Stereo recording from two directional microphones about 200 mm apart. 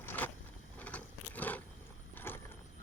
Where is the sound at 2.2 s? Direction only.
10° left (ahead or behind).